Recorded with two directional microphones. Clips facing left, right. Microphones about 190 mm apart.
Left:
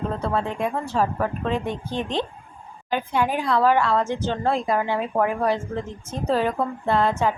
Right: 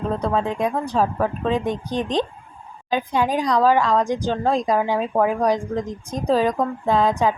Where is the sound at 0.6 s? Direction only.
15° right (ahead or behind).